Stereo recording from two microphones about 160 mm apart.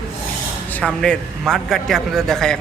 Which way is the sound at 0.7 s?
5° left (ahead or behind).